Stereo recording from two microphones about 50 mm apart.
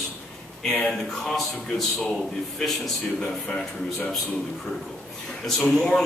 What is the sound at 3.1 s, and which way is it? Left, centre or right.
Speech, centre.